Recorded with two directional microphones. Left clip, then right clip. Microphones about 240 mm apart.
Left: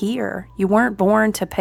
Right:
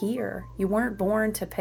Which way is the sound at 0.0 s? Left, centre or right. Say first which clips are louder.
Left 6 dB; left.